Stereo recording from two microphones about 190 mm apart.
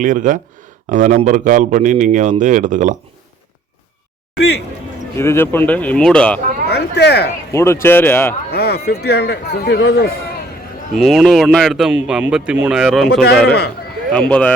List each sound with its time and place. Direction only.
0.0 s speech: 45° right (ahead or behind)
5.1 s speech: 15° left (ahead or behind)
6.7 s speech: 60° left (ahead or behind)
7.5 s speech: 15° left (ahead or behind)
8.4 s speech: 55° left (ahead or behind)
10.9 s speech: centre (ahead or behind)
13.5 s speech: 60° left (ahead or behind)
14.1 s speech: 5° left (ahead or behind)